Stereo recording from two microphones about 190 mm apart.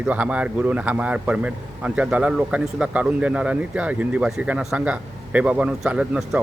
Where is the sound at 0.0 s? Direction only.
5° right (ahead or behind).